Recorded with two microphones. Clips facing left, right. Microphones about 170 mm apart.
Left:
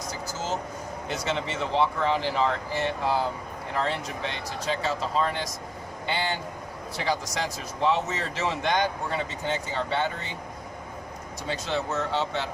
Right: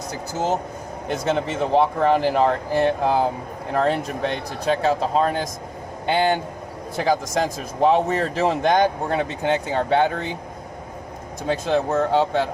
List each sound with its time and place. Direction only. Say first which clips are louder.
0.1 s speech: right 8 dB; 60° right (ahead or behind)
1.0 s speech: right 7 dB; 50° right (ahead or behind)
11.4 s speech: right 8 dB; 55° right (ahead or behind)